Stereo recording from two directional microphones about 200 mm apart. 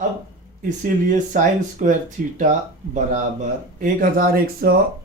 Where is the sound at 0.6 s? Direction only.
40° right (ahead or behind).